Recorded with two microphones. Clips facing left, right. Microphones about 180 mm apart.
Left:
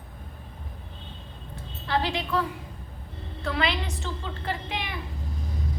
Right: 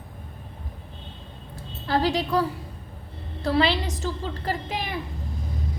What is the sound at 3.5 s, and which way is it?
A woman's voice, 35° right (ahead or behind).